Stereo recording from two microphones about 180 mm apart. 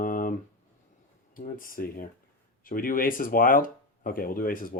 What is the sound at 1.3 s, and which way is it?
Speech, 50° left (ahead or behind).